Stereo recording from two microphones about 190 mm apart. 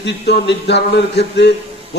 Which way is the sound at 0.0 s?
65° left (ahead or behind).